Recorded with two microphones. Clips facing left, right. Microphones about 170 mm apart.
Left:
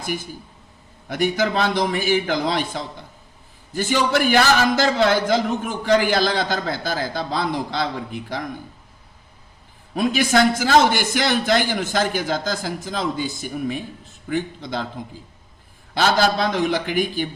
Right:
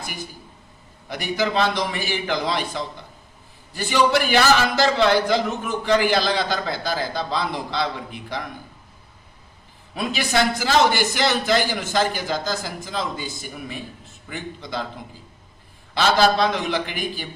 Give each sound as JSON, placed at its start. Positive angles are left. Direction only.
{"t": 1.0, "sound": "a man's voice", "side_deg": 50}
{"t": 9.9, "sound": "a man's voice", "side_deg": 45}
{"t": 16.0, "sound": "a man's voice", "side_deg": 45}